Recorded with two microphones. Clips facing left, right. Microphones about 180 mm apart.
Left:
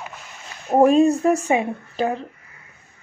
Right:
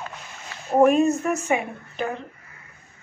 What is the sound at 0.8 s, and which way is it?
Speech, 35° left (ahead or behind).